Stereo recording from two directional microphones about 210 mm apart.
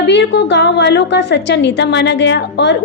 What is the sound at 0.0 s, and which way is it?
A woman's voice, 55° left (ahead or behind).